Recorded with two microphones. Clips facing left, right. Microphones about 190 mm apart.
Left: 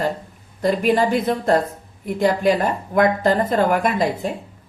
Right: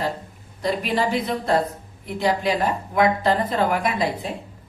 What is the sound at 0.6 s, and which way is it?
A woman's voice, 50° left (ahead or behind).